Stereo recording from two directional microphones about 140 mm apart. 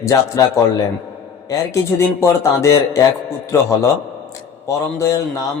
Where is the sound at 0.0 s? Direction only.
20° left (ahead or behind).